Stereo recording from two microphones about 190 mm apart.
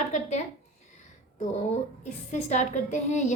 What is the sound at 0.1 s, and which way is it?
Speech, 40° left (ahead or behind).